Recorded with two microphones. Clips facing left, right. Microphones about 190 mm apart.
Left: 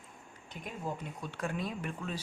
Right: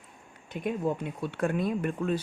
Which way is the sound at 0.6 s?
65° right (ahead or behind).